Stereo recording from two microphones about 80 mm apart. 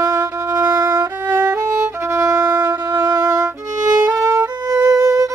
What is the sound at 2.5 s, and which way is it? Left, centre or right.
Wind instrument, right.